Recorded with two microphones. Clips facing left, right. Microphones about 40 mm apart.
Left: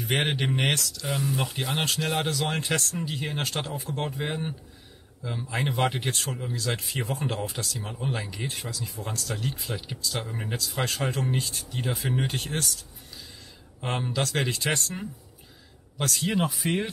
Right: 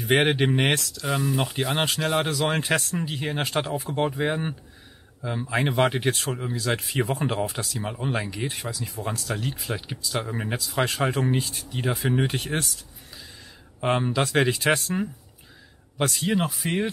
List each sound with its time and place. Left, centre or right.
0.0 s speech: centre
6.2 s speech: right
6.7 s speech: centre
11.5 s speech: centre
13.7 s speech: right; by 16.9 s centre